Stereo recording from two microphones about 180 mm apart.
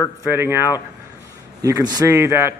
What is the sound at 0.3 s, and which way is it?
A man's voice, 15° right (ahead or behind).